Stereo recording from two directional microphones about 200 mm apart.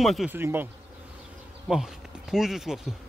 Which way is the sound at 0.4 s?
10° right (ahead or behind).